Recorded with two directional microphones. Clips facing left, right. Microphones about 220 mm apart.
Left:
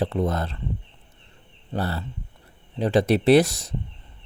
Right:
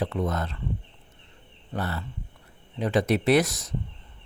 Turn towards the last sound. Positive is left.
turn(degrees=30)  # may be behind; listen again after turning